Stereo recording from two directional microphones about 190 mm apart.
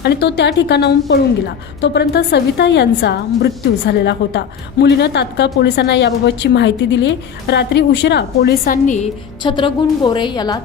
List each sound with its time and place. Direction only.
0.0 s a woman's voice: 60° left (ahead or behind); by 9.0 s 45° left (ahead or behind)
9.4 s a woman's voice: 25° left (ahead or behind)